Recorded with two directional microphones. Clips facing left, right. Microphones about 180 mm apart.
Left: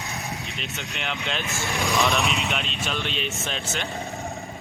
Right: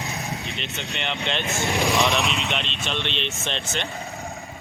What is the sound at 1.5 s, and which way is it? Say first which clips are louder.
Speech: right 3 dB; 20° right (ahead or behind).